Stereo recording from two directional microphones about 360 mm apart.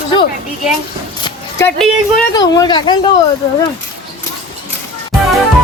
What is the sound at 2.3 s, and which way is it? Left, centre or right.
Speech, centre.